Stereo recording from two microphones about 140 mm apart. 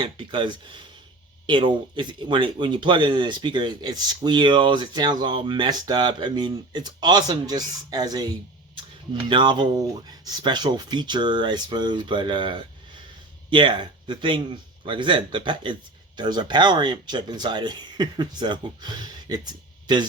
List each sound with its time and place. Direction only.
0.0 s speech: 35° right (ahead or behind)
9.3 s speech: 35° right (ahead or behind)